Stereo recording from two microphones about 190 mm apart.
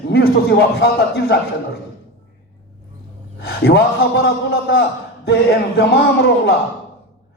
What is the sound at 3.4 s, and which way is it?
A man's voice, 55° left (ahead or behind).